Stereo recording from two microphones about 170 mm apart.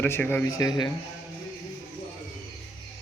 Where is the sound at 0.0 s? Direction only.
10° left (ahead or behind).